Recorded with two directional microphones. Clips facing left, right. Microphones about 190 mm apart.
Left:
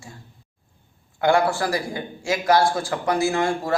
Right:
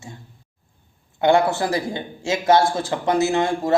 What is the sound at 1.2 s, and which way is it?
A man's voice, 20° right (ahead or behind).